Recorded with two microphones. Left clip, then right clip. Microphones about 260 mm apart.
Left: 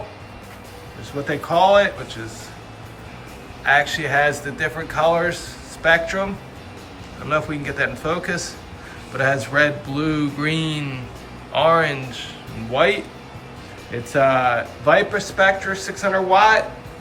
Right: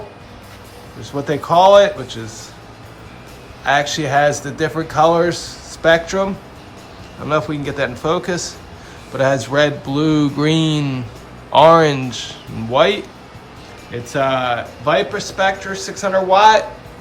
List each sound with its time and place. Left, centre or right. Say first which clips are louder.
1.3 s speech: right 5 dB; centre
3.6 s a man's voice: right 1 dB; centre
7.3 s speech: right 3 dB; centre